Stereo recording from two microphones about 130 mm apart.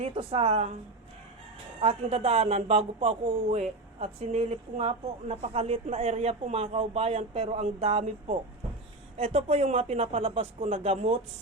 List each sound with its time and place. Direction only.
0.0 s speech: 45° right (ahead or behind)
1.8 s speech: 50° right (ahead or behind)